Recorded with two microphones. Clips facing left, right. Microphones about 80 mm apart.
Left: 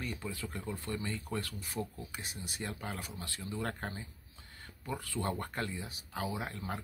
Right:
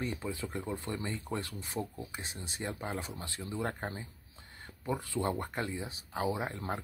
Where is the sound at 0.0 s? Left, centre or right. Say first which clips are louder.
Right 4 dB; right.